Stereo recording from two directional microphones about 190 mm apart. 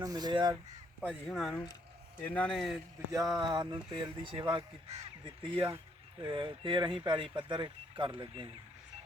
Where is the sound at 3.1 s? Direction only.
20° right (ahead or behind).